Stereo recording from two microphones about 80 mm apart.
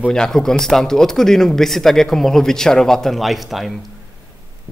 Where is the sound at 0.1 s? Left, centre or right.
Centre.